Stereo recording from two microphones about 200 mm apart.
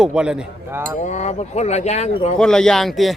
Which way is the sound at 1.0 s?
35° left (ahead or behind).